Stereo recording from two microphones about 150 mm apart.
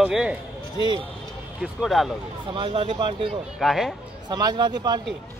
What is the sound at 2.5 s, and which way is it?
Speech, 35° right (ahead or behind).